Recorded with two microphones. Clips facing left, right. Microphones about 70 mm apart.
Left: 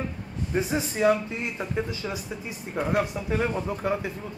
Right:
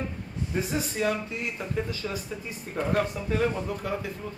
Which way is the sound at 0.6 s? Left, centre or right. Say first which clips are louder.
Left 3 dB; left.